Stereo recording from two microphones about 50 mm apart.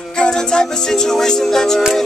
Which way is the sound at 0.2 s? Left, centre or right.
Centre.